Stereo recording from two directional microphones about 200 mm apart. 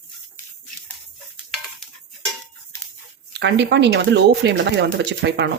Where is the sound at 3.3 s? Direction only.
60° right (ahead or behind).